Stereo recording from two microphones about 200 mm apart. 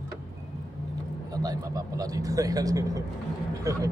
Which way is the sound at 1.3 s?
20° right (ahead or behind).